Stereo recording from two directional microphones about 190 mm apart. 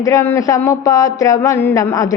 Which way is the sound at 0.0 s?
15° left (ahead or behind).